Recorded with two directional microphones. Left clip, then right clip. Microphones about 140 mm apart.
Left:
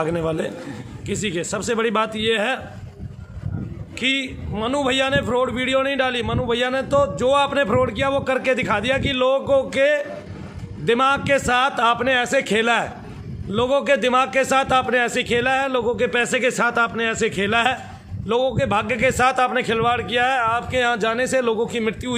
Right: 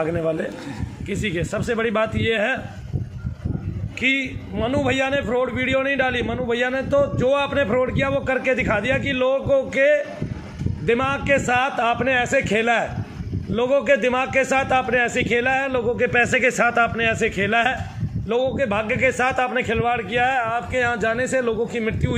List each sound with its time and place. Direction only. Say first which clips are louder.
0.0 s a man's voice: even; 30° left (ahead or behind)
1.0 s a man's voice: left 1 dB; 20° left (ahead or behind)
4.0 s a man's voice: right 1 dB; 15° left (ahead or behind); by 22.1 s 30° left (ahead or behind)